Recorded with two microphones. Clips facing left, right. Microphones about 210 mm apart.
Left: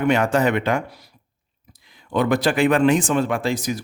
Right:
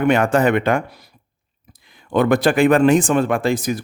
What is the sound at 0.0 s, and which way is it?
Speech, 55° right (ahead or behind).